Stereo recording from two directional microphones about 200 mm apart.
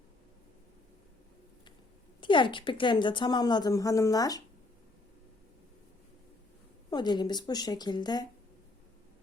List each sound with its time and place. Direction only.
2.2 s a woman's voice: 25° left (ahead or behind)
6.9 s a woman's voice: 20° left (ahead or behind)